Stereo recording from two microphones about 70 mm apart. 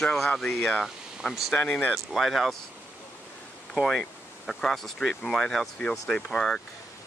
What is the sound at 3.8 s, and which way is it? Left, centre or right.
Speech, centre.